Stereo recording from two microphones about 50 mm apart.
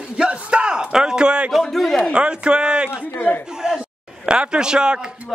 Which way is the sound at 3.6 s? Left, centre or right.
Centre.